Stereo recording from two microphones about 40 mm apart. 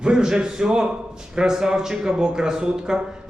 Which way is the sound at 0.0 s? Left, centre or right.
Centre.